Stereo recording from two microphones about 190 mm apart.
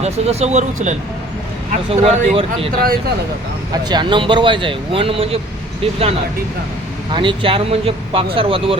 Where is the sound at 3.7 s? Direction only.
20° right (ahead or behind).